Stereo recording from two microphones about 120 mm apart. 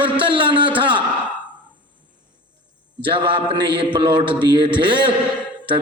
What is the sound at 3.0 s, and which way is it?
A man's voice, 45° right (ahead or behind).